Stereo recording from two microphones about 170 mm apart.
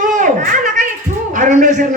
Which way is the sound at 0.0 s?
50° right (ahead or behind).